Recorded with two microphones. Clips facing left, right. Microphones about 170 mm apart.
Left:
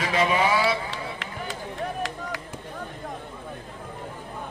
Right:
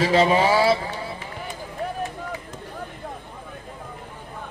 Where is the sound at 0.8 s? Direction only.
90° left.